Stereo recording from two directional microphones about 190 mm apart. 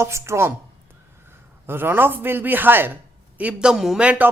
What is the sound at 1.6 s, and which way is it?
Speech, 10° right (ahead or behind).